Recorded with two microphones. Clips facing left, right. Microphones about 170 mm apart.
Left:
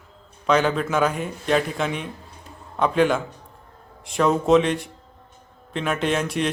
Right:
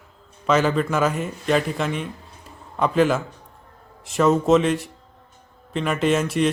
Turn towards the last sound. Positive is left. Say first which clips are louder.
# right 3 dB
turn(degrees=0)  # may be behind; listen again after turning